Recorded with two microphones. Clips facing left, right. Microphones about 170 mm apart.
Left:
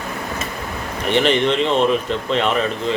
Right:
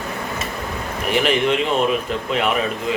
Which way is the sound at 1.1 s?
5° right (ahead or behind).